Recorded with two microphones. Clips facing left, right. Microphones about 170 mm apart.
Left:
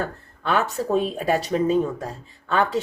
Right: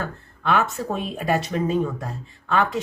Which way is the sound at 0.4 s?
35° left (ahead or behind).